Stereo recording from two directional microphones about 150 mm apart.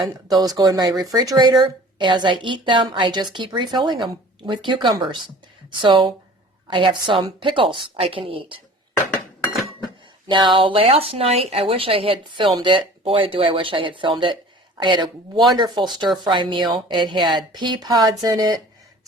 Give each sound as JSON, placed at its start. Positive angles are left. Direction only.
{"t": 0.3, "sound": "speech", "side_deg": -25}
{"t": 10.2, "sound": "speech", "side_deg": -30}